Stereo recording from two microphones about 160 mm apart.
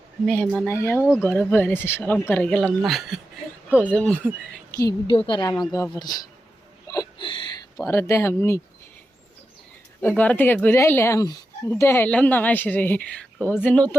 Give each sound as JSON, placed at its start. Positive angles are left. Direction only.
{"t": 0.7, "sound": "speech", "side_deg": 15}
{"t": 3.8, "sound": "speech", "side_deg": 10}
{"t": 4.8, "sound": "a woman's voice", "side_deg": 30}
{"t": 6.9, "sound": "a sound", "side_deg": 25}
{"t": 7.9, "sound": "speech", "side_deg": 15}
{"t": 10.0, "sound": "speech", "side_deg": 10}